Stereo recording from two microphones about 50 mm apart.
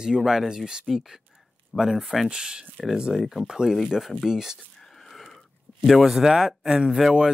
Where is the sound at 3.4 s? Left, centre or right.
Centre.